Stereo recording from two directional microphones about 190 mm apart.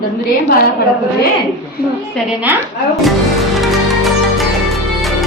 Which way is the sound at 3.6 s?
Centre (ahead or behind).